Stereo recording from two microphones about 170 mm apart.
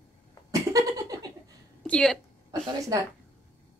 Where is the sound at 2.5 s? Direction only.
20° right (ahead or behind).